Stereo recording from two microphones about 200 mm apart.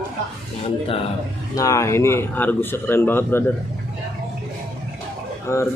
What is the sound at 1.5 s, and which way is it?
A man's voice, 15° left (ahead or behind).